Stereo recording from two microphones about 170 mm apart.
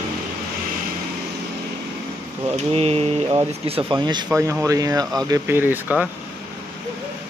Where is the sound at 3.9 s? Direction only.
25° right (ahead or behind).